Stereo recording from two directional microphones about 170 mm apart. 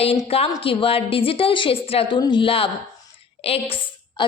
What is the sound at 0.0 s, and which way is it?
A woman's voice, 35° left (ahead or behind).